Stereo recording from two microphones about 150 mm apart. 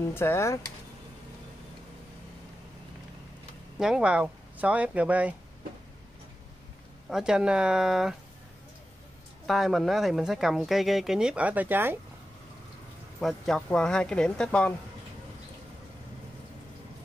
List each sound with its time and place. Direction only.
0.1 s speech: 15° left (ahead or behind)
3.8 s speech: 5° right (ahead or behind)
7.1 s speech: 5° right (ahead or behind)
9.5 s speech: centre (ahead or behind)
13.2 s speech: centre (ahead or behind)